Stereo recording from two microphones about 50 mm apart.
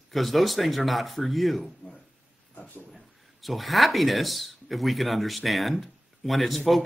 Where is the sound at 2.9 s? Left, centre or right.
Centre.